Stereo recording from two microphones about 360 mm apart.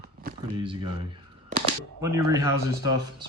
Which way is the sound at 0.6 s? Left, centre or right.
Centre.